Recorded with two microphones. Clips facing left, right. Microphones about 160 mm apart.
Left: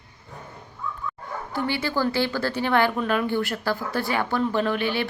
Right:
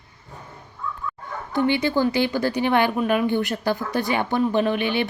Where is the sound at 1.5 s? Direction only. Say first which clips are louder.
Right 6 dB; 20° right (ahead or behind).